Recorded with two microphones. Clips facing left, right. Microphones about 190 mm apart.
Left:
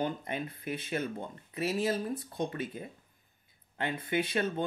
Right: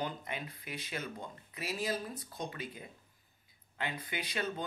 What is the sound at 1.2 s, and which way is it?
Speech, 25° left (ahead or behind).